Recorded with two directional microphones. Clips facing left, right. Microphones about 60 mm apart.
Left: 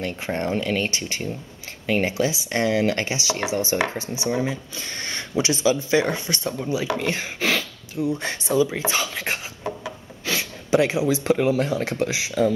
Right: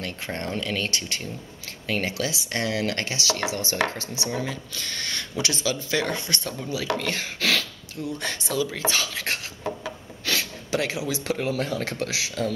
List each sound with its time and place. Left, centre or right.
0.0 s speech: centre
10.7 s speech: centre